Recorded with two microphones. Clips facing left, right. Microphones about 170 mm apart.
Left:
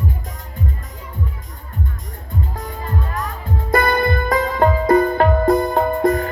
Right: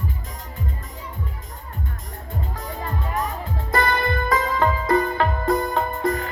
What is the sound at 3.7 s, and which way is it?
Music, 50° left (ahead or behind).